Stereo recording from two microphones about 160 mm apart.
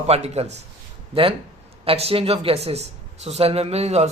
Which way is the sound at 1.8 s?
35° right (ahead or behind).